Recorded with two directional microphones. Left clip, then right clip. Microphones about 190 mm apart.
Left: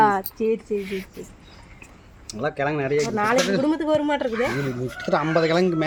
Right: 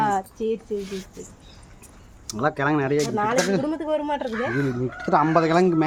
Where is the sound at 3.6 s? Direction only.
35° left (ahead or behind).